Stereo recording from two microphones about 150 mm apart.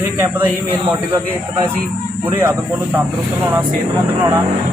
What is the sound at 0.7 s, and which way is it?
A man's voice, 25° right (ahead or behind).